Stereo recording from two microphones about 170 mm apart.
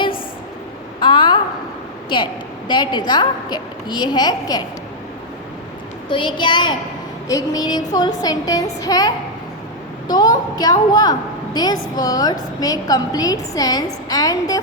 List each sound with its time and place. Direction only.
0.9 s a sound: 30° left (ahead or behind)
2.0 s a woman's voice: 25° left (ahead or behind)
6.1 s a woman's voice: 30° left (ahead or behind)